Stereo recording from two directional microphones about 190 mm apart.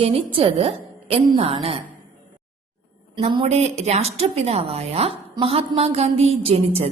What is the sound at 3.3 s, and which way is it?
A woman's voice, 30° right (ahead or behind).